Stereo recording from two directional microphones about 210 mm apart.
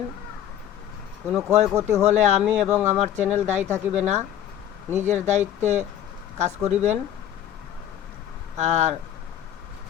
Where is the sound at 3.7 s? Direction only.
35° right (ahead or behind).